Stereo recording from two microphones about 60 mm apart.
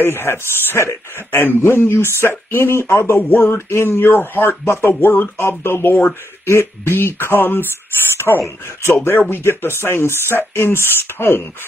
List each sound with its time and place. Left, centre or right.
0.0 s speech: left
3.2 s speech: left